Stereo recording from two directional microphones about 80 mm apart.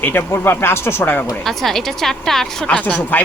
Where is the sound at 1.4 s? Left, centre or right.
Centre.